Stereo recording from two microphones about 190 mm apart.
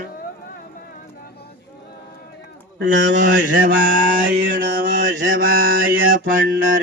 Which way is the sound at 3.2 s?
45° right (ahead or behind).